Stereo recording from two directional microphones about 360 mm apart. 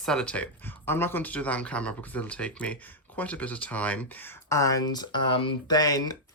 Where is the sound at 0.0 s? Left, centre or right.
Centre.